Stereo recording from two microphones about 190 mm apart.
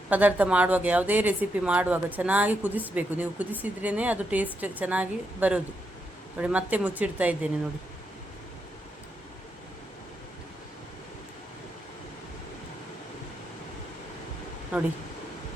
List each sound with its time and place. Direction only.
0.1 s speech: 10° right (ahead or behind)